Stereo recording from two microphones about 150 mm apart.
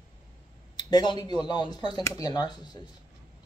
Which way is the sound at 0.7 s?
30° left (ahead or behind).